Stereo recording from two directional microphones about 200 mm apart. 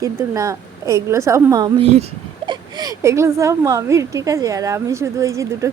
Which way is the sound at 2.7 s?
20° right (ahead or behind).